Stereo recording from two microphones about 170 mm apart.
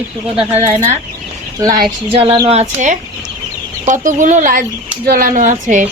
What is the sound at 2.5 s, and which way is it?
A woman's voice, 45° right (ahead or behind).